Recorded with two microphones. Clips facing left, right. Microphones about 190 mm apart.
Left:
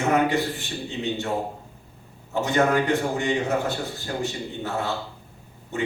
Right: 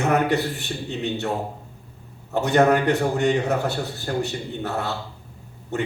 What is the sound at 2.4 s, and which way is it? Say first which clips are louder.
A man's voice: right 3 dB; 60° right (ahead or behind).